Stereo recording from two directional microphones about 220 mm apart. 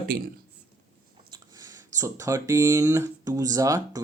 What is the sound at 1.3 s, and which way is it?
Speech, 15° right (ahead or behind).